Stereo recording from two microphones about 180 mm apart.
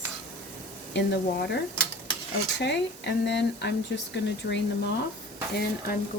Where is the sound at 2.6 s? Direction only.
70° left (ahead or behind).